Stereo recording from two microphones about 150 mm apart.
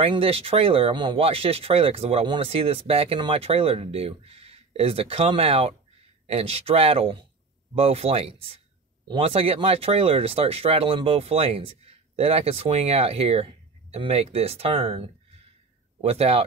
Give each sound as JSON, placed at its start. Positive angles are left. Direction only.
{"t": 0.0, "sound": "speech", "side_deg": -40}